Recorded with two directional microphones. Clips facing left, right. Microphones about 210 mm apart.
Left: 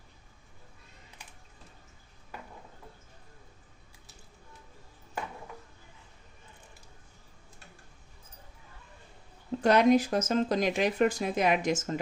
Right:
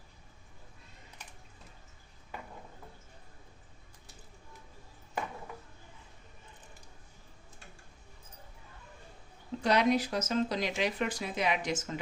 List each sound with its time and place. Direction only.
9.6 s speech: 50° left (ahead or behind)